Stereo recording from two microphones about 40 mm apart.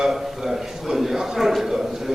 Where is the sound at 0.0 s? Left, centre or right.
Centre.